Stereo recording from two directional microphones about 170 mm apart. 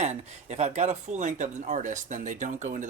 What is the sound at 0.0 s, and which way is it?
Speech, 40° right (ahead or behind).